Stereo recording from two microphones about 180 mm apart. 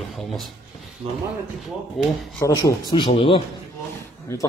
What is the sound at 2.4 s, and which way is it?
Speech, 15° left (ahead or behind).